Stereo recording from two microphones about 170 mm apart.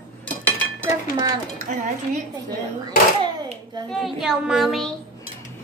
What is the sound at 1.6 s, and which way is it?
Speech, 45° right (ahead or behind).